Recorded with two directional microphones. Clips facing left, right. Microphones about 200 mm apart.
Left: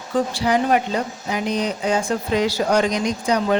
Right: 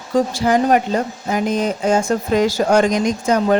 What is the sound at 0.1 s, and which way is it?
Speech, 45° right (ahead or behind).